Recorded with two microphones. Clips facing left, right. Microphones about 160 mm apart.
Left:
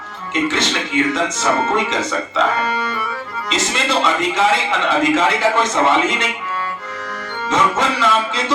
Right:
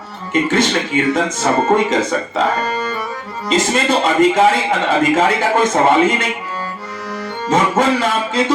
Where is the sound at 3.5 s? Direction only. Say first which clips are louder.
Right 5 dB; 50° right (ahead or behind).